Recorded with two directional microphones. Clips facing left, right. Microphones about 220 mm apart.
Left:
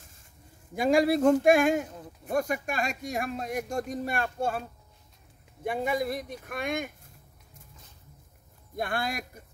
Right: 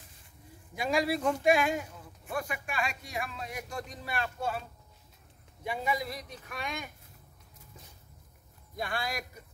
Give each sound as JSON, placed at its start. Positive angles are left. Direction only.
{"t": 0.7, "sound": "speech", "side_deg": 50}
{"t": 8.7, "sound": "speech", "side_deg": 55}